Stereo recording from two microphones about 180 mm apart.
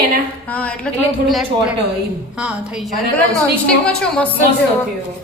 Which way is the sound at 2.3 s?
5° right (ahead or behind).